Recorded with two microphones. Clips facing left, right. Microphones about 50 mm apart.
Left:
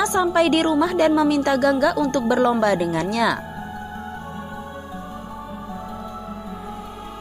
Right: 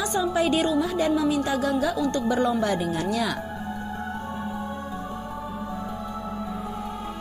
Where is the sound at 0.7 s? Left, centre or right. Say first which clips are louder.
Left 6 dB; left.